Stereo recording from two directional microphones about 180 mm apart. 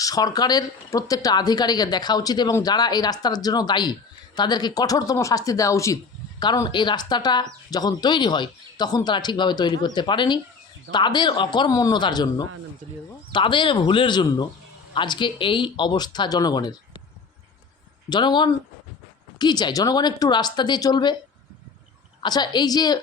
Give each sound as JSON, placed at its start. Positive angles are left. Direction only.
{"t": 0.0, "sound": "speech", "side_deg": 20}
{"t": 12.8, "sound": "speech", "side_deg": -40}
{"t": 13.3, "sound": "speech", "side_deg": 25}
{"t": 18.1, "sound": "speech", "side_deg": 25}
{"t": 22.2, "sound": "speech", "side_deg": 25}